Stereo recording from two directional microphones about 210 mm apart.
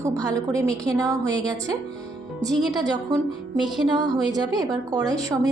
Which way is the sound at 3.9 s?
20° right (ahead or behind).